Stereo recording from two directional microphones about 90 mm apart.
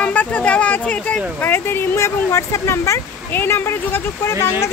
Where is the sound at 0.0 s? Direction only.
15° left (ahead or behind).